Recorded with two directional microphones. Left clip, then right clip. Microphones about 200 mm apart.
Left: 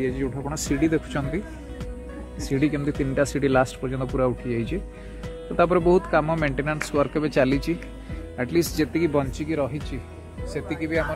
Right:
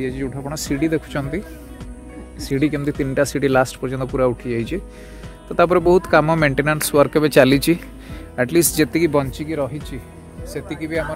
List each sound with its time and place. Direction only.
0.0 s speech: 45° right (ahead or behind)
2.4 s speech: 55° right (ahead or behind)
9.4 s speech: 25° right (ahead or behind)
10.5 s speech: 15° right (ahead or behind)